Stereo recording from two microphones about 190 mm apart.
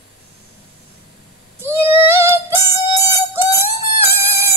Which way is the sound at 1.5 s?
15° right (ahead or behind).